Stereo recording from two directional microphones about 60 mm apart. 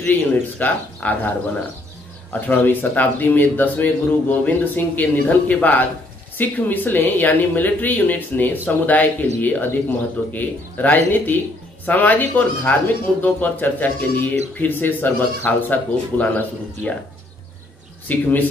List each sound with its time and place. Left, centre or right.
0.0 s speech: left
18.0 s speech: left